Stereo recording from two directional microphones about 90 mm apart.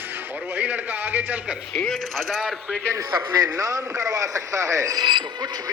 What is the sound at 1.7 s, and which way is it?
Speech, 5° left (ahead or behind).